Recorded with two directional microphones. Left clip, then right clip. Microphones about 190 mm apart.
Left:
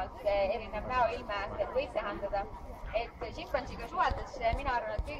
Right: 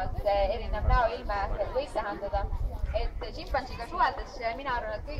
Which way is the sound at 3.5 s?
30° left (ahead or behind).